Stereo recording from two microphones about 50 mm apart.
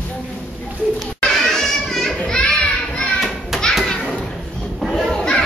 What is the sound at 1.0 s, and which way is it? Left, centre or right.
Children playing, centre.